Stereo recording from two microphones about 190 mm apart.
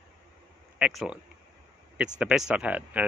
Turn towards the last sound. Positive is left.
turn(degrees=-10)  # may be behind; listen again after turning